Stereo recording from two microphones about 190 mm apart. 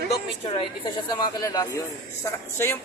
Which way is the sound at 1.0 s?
20° left (ahead or behind).